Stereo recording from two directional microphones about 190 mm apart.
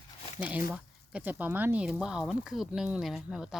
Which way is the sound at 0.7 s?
10° right (ahead or behind).